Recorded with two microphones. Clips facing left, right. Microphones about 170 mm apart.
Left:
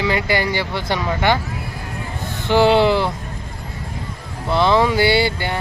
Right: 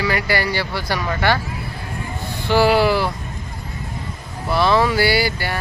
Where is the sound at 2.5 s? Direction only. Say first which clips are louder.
Left 2 dB; 20° left (ahead or behind).